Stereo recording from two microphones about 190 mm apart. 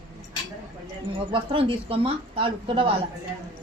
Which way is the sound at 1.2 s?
25° right (ahead or behind).